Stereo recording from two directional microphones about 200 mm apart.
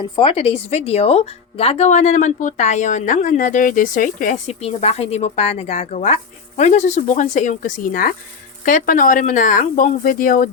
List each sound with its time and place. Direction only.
0.0 s speech: 25° left (ahead or behind); by 10.5 s 45° left (ahead or behind)